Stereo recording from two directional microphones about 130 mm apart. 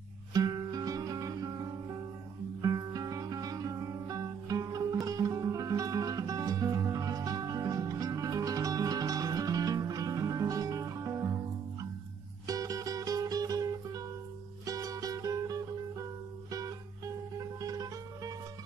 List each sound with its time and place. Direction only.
0.3 s guitar: 30° right (ahead or behind)
2.6 s music: 30° right (ahead or behind)
12.4 s music: 25° right (ahead or behind)